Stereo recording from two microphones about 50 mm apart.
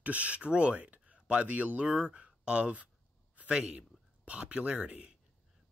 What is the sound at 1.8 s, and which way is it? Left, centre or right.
Speech, centre.